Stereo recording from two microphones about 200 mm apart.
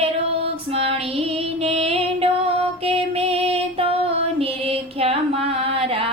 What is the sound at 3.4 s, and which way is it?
Music, 30° right (ahead or behind).